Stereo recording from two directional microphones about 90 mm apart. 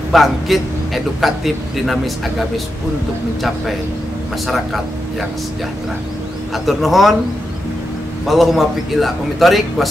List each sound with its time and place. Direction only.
0.1 s a man's voice: centre (ahead or behind)
6.5 s a man's voice: centre (ahead or behind)
8.3 s a man's voice: centre (ahead or behind)